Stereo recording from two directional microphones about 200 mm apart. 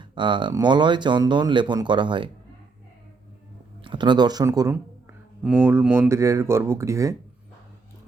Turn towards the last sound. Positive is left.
turn(degrees=-15)  # may be behind; listen again after turning